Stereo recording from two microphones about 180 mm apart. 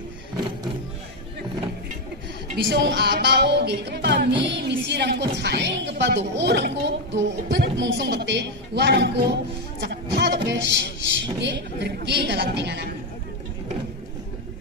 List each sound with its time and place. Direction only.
2.5 s a woman's voice: 70° right (ahead or behind)
7.2 s a woman's voice: 80° right